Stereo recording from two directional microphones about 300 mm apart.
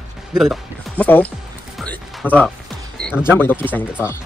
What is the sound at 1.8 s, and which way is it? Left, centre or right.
Music, centre.